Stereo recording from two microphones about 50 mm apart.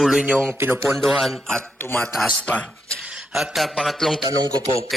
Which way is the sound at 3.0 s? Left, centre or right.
Right.